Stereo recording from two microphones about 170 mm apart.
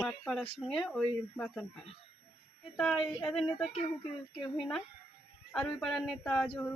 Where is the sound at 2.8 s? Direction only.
Centre (ahead or behind).